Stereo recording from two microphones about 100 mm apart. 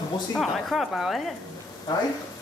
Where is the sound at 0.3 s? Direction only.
Centre (ahead or behind).